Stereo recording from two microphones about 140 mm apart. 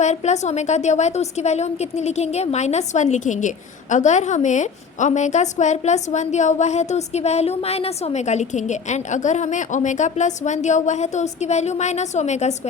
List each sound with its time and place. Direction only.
0.0 s a woman's voice: 55° left (ahead or behind)